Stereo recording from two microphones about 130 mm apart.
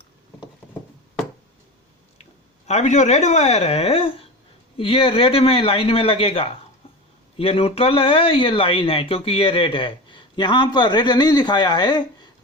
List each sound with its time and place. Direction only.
2.6 s speech: 60° left (ahead or behind); by 12.0 s 30° left (ahead or behind)